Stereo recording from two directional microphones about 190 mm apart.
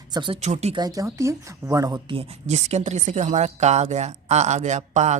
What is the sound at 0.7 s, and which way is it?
Speech, 20° right (ahead or behind).